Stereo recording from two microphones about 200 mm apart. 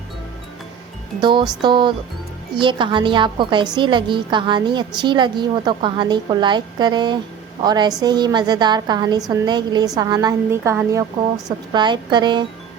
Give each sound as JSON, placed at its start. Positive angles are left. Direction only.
{"t": 1.2, "sound": "a woman's voice", "side_deg": -25}